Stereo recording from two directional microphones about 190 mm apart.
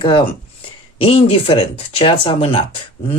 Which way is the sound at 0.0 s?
25° left (ahead or behind).